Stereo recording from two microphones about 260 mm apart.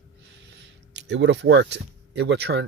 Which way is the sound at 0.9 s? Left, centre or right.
Right.